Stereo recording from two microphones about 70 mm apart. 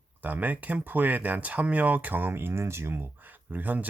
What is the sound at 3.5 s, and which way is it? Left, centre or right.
Speech, right.